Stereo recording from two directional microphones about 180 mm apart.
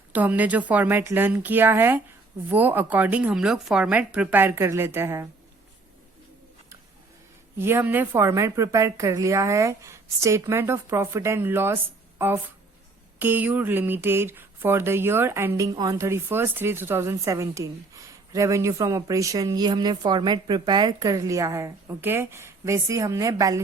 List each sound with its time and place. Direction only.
0.1 s speech: 10° right (ahead or behind)
7.6 s speech: 10° right (ahead or behind)